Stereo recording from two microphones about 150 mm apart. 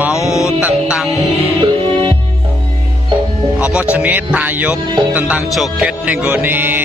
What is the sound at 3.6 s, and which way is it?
Speech, 10° right (ahead or behind).